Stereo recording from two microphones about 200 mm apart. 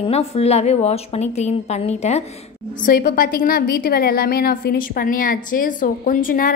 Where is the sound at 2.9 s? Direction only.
45° left (ahead or behind).